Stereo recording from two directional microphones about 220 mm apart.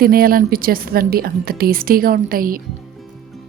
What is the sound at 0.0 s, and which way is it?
A woman's voice, 40° right (ahead or behind).